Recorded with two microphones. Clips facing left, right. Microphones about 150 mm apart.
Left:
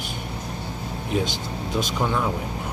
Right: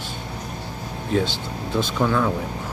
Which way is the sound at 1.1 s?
15° left (ahead or behind).